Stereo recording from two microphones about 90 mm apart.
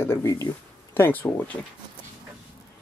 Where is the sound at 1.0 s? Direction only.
20° left (ahead or behind).